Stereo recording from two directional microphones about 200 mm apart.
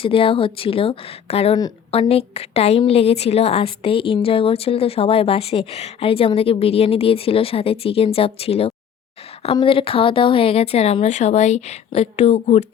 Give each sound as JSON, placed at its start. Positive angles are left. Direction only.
{"t": 0.0, "sound": "a woman's voice", "side_deg": 25}